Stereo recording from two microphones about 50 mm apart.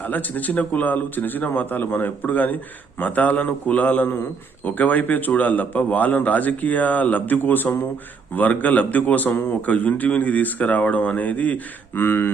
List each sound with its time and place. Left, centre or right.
0.0 s a man's voice: left
11.9 s speech: left